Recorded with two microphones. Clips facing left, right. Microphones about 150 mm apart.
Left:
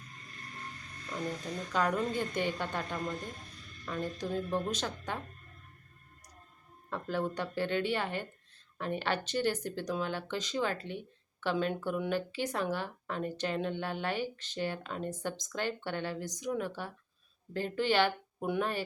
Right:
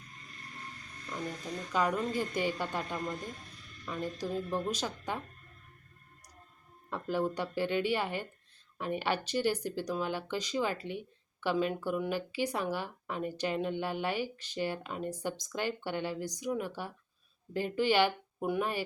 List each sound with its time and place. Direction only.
1.7 s speech: 5° right (ahead or behind)
6.9 s speech: 10° right (ahead or behind)